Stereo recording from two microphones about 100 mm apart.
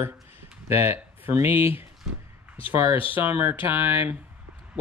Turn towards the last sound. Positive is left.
turn(degrees=-20)  # may be behind; listen again after turning